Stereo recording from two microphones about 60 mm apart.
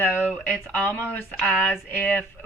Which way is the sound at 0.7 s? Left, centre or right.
Left.